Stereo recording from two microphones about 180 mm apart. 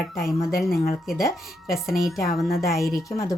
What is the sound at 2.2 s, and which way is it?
Speech, 55° left (ahead or behind).